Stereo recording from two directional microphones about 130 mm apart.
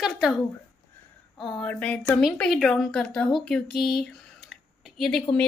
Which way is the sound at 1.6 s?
10° left (ahead or behind).